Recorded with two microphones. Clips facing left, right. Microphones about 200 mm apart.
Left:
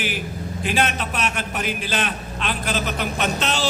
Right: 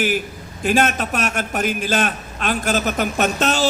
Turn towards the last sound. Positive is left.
turn(degrees=-45)  # may be behind; listen again after turning